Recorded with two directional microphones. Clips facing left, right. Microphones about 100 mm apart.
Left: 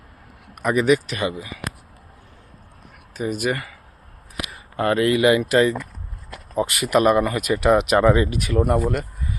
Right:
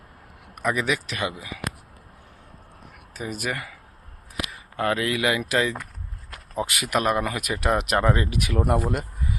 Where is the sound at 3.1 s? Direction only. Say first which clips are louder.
Left 6 dB; centre (ahead or behind).